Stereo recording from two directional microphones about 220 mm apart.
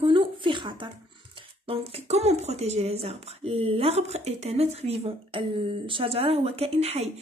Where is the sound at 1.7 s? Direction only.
25° right (ahead or behind).